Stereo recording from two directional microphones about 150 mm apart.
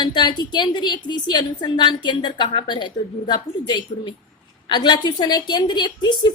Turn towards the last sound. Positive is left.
turn(degrees=30)  # may be behind; listen again after turning